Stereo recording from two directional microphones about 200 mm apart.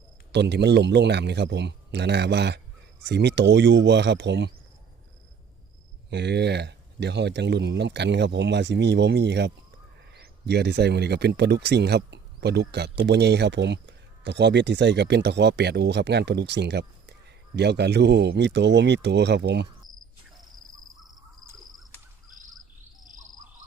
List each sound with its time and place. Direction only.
0.3 s speech: 60° right (ahead or behind)
6.1 s speech: 55° right (ahead or behind)